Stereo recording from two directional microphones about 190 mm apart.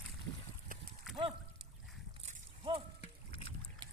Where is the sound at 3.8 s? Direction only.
25° right (ahead or behind).